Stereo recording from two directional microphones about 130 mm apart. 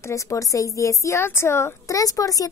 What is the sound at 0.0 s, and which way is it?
A woman's voice, 25° left (ahead or behind).